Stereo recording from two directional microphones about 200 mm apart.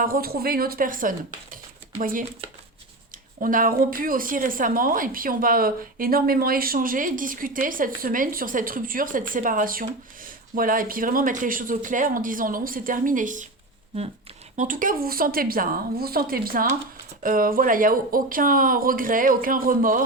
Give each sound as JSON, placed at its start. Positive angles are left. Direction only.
{"t": 0.0, "sound": "a woman's voice", "side_deg": -45}
{"t": 3.4, "sound": "a woman's voice", "side_deg": -45}
{"t": 14.5, "sound": "a woman's voice", "side_deg": -40}